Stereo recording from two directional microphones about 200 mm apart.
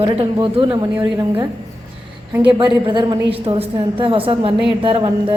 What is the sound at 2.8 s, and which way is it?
A woman's voice, 25° right (ahead or behind).